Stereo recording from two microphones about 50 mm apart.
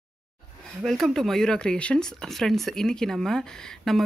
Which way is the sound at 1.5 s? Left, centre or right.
Centre.